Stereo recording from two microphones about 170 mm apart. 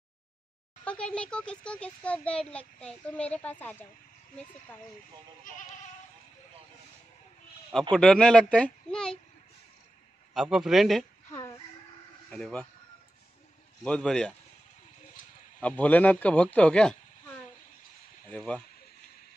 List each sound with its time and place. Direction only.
0.8 s a child's voice: 5° left (ahead or behind)
5.5 s goat: 50° left (ahead or behind)
7.9 s speech: 5° left (ahead or behind)
10.3 s speech: centre (ahead or behind)
11.3 s chicken: 15° left (ahead or behind)
12.3 s speech: 5° left (ahead or behind)
13.8 s speech: 5° left (ahead or behind)
15.6 s a child's voice: 10° left (ahead or behind)